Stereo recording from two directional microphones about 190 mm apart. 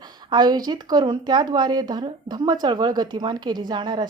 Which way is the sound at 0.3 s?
20° right (ahead or behind).